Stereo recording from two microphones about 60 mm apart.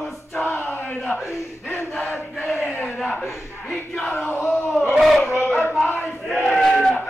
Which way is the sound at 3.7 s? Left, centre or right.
Centre.